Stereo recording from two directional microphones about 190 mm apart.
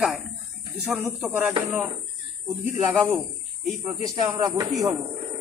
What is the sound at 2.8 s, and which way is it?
A man's voice, 15° right (ahead or behind).